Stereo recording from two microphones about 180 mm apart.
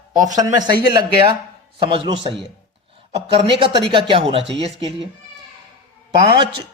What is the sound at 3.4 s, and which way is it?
Speech, 30° right (ahead or behind).